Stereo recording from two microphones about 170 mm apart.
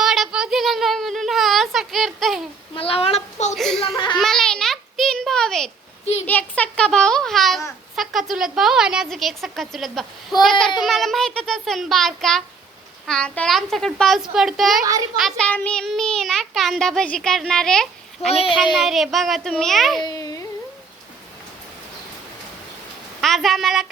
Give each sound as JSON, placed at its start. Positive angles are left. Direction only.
{"t": 0.0, "sound": "a sound", "side_deg": -5}
{"t": 2.7, "sound": "a woman's voice", "side_deg": 35}
{"t": 3.5, "sound": "a child's voice", "side_deg": 0}
{"t": 3.9, "sound": "a child's voice", "side_deg": 25}
{"t": 4.2, "sound": "a child's voice", "side_deg": 0}
{"t": 20.1, "sound": "a sound", "side_deg": 20}
{"t": 23.2, "sound": "a child's voice", "side_deg": 0}